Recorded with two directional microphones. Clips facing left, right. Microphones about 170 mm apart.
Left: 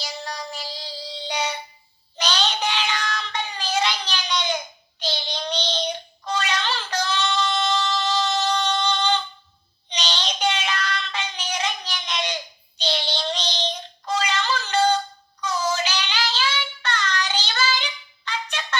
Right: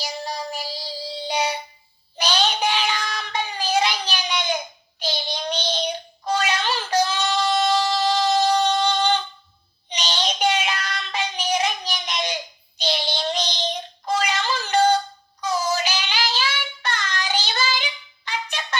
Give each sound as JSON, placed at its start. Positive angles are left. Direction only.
{"t": 0.0, "sound": "child singing", "side_deg": -10}
{"t": 8.0, "sound": "a sound", "side_deg": -15}
{"t": 9.9, "sound": "child singing", "side_deg": -10}
{"t": 15.4, "sound": "synthetic singing", "side_deg": -10}
{"t": 16.8, "sound": "child singing", "side_deg": -10}
{"t": 18.3, "sound": "music", "side_deg": -15}